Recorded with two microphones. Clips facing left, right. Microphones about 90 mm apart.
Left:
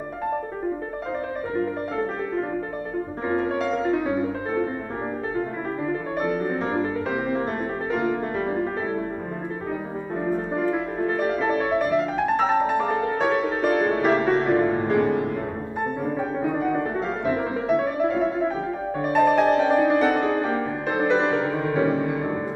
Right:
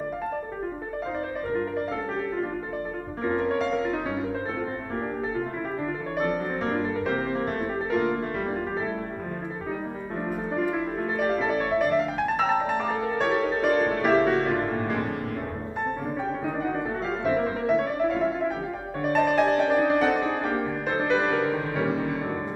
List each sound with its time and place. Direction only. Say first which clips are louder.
3.3 s music: even; 5° left (ahead or behind)
6.1 s music: left 1 dB; 5° left (ahead or behind)
11.2 s music: even; 5° left (ahead or behind)
14.7 s music: left 6 dB; 15° left (ahead or behind)
16.4 s music: left 6 dB; 10° left (ahead or behind)
21.3 s music: left 2 dB; 15° left (ahead or behind)